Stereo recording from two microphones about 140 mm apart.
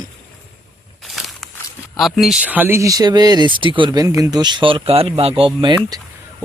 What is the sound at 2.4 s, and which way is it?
Speech, 10° right (ahead or behind).